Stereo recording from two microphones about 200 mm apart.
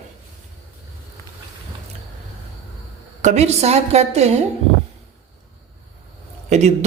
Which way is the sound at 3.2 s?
35° right (ahead or behind).